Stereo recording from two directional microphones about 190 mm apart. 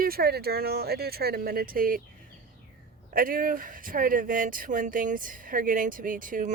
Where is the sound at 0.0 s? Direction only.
55° right (ahead or behind).